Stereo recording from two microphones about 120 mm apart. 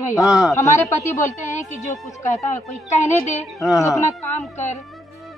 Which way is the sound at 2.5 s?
80° left.